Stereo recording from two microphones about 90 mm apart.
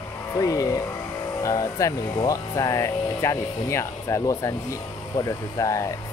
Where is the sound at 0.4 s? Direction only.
40° left (ahead or behind).